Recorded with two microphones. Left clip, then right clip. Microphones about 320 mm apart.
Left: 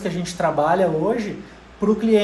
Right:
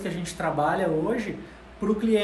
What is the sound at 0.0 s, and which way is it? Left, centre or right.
Speech, centre.